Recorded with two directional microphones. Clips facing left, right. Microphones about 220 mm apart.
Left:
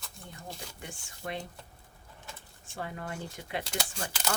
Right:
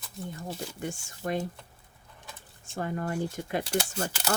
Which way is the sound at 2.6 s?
45° right (ahead or behind).